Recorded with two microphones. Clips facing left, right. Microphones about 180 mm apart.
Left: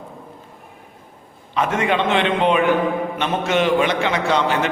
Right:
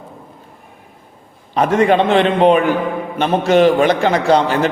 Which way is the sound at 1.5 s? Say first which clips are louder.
Right 7 dB; 40° right (ahead or behind).